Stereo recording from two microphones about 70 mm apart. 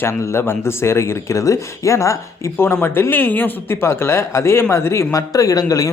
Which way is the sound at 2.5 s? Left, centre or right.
Left.